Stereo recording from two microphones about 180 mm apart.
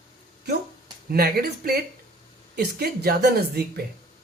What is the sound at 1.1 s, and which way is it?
Speech, 60° right (ahead or behind).